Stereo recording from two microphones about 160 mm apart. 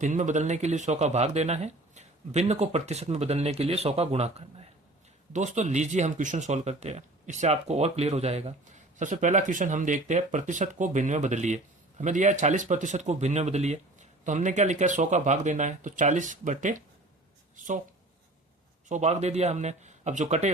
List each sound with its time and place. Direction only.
0.0 s speech: 50° right (ahead or behind)
18.9 s speech: 45° right (ahead or behind)